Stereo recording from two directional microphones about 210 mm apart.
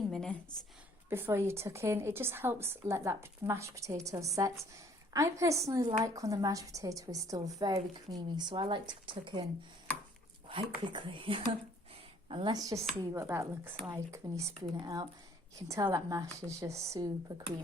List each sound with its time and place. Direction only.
0.1 s a sound: 5° left (ahead or behind)
1.1 s a woman's voice: 10° right (ahead or behind)
10.8 s a woman's voice: 25° right (ahead or behind)